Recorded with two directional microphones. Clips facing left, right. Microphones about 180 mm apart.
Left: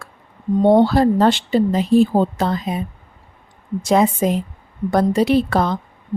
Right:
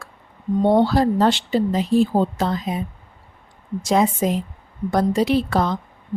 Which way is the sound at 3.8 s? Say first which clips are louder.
Left 3 dB; 60° left (ahead or behind).